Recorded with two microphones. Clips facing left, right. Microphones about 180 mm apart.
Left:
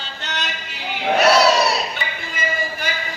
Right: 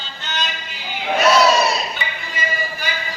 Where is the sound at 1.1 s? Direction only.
65° left (ahead or behind).